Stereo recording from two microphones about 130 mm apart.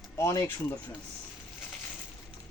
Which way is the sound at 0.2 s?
25° left (ahead or behind).